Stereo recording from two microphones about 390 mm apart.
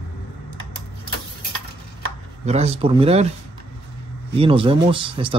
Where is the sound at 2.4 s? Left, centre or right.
Centre.